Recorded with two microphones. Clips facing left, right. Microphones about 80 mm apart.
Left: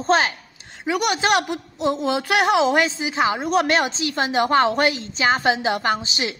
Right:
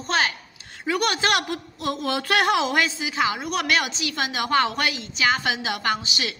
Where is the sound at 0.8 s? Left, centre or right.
Centre.